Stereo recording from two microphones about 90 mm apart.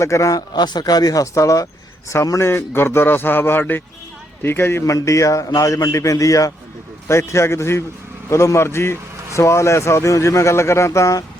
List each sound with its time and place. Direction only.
0.0 s a man's voice: 35° left (ahead or behind)